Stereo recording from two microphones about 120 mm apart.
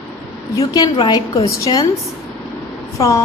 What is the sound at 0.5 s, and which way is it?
Speech, 30° left (ahead or behind).